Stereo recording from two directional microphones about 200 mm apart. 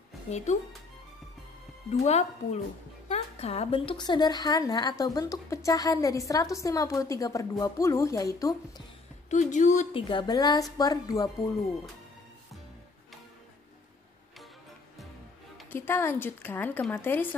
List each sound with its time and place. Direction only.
2.0 s a woman's voice: 35° left (ahead or behind); by 8.8 s 15° left (ahead or behind)
9.3 s a woman's voice: 40° left (ahead or behind)
10.0 s a woman's voice: 20° left (ahead or behind)
15.7 s a woman's voice: 10° left (ahead or behind)